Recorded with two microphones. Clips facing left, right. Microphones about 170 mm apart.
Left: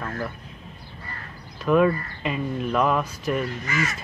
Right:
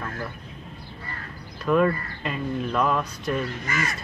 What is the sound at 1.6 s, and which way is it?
Speech, 5° left (ahead or behind).